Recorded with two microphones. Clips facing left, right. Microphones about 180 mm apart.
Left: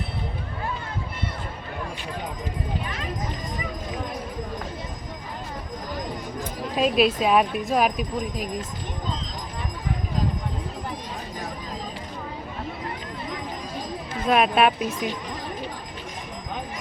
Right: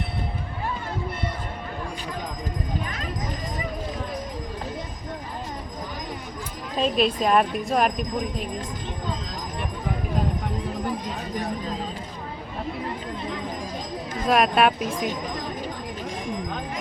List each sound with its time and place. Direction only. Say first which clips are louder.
6.7 s speech: left 2 dB; 5° left (ahead or behind)
14.3 s speech: even; centre (ahead or behind)
14.8 s speech: even; 50° right (ahead or behind)